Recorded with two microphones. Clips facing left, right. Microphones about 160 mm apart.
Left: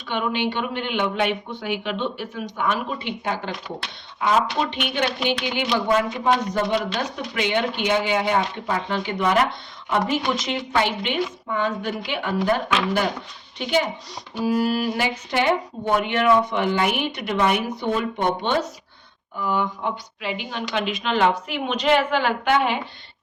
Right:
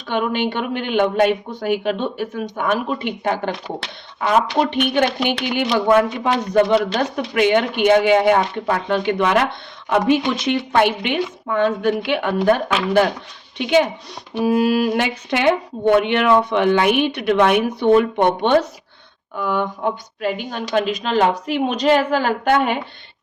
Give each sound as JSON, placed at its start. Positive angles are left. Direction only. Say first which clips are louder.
{"t": 0.1, "sound": "a man's voice", "louder": "right 4 dB", "side_deg": -45}
{"t": 14.3, "sound": "speech", "louder": "right 5 dB", "side_deg": -60}